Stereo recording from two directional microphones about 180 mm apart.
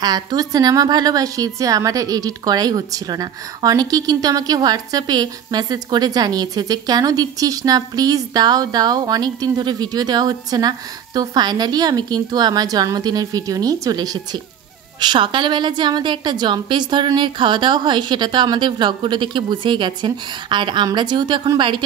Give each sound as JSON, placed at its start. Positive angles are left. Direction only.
{"t": 0.0, "sound": "a woman's voice", "side_deg": -20}